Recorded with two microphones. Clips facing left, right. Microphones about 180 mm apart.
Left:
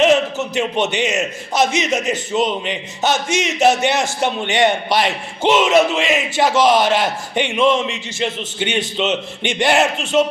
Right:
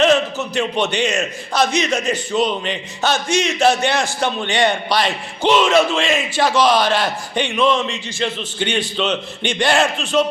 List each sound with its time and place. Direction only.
0.0 s a man's voice: 20° left (ahead or behind)